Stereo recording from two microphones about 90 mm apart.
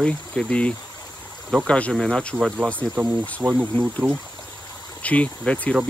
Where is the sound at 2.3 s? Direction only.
15° right (ahead or behind).